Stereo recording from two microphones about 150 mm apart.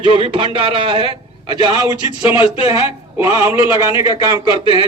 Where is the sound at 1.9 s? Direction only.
40° left (ahead or behind).